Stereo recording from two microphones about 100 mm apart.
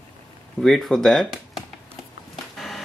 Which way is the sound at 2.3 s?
Centre (ahead or behind).